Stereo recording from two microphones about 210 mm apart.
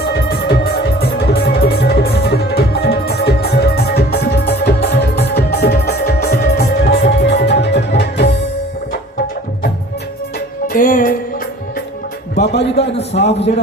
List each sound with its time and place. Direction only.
0.0 s music: 50° left (ahead or behind)
10.7 s music: 40° left (ahead or behind)
12.5 s a man's voice: 55° left (ahead or behind)
13.0 s a man's voice: 30° left (ahead or behind)